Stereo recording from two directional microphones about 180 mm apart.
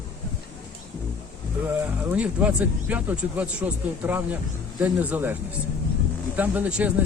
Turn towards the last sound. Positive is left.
turn(degrees=-5)  # may be behind; listen again after turning